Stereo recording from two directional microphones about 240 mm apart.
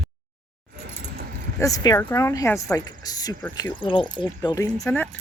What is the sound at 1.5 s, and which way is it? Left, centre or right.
Speech, centre.